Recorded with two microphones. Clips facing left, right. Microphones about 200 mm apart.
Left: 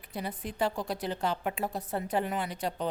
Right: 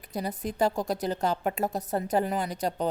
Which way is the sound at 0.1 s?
40° right (ahead or behind).